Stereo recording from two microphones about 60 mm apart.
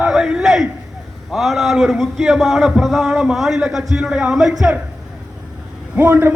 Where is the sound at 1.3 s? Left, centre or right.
Centre.